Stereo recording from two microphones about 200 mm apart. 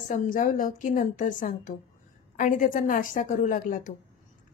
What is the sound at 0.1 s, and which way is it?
A woman's voice, 40° left (ahead or behind).